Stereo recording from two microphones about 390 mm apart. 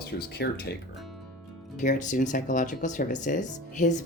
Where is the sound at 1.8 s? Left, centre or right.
Centre.